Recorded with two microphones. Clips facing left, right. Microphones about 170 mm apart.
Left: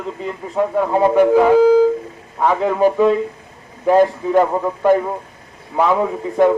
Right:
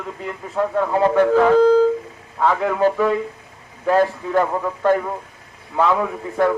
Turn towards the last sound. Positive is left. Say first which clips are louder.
# left 5 dB
turn(degrees=20)  # may be behind; listen again after turning